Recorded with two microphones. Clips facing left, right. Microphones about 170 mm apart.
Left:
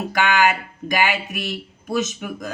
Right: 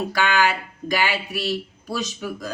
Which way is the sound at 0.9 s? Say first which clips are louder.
Left 2 dB; 20° left (ahead or behind).